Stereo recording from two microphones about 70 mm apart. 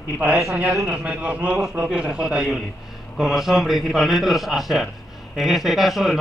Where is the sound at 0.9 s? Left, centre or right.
Centre.